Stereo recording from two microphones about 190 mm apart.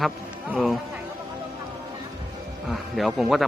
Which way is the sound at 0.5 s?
Centre (ahead or behind).